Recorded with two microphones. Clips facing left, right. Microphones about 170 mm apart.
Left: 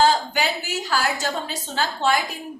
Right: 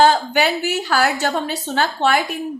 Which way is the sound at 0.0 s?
60° right (ahead or behind).